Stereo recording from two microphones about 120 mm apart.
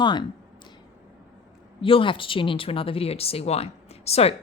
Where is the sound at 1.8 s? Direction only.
45° left (ahead or behind).